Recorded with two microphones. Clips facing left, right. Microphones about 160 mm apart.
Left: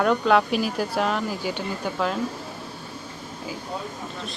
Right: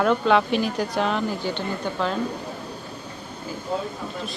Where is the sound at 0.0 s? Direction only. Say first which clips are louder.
Even; centre (ahead or behind).